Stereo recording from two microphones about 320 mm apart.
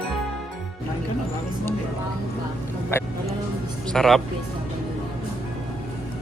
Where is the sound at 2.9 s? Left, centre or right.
Centre.